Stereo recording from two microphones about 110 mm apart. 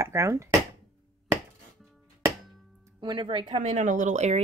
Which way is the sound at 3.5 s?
90° right.